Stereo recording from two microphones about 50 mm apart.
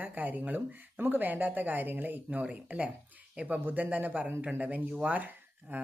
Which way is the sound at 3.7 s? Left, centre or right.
Right.